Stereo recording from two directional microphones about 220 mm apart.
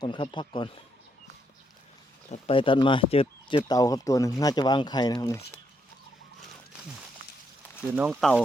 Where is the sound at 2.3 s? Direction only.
25° left (ahead or behind).